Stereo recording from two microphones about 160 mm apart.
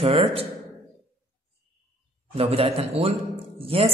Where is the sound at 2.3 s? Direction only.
40° right (ahead or behind).